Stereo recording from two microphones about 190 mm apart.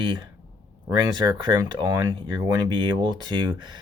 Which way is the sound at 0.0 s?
25° right (ahead or behind).